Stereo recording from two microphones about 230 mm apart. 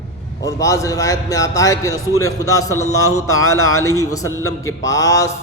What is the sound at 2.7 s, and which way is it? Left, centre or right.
Speech, left.